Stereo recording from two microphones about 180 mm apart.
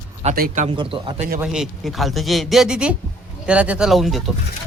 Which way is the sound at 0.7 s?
30° right (ahead or behind).